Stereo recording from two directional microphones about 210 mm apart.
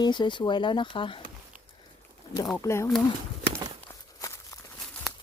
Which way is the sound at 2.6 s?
15° left (ahead or behind).